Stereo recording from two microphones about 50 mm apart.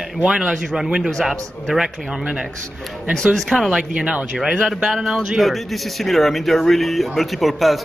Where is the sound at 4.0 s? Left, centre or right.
Centre.